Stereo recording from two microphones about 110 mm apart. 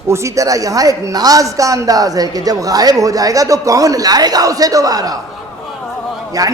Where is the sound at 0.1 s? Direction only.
25° right (ahead or behind).